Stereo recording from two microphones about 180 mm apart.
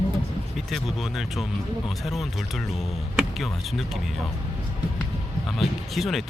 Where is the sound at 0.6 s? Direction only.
Centre (ahead or behind).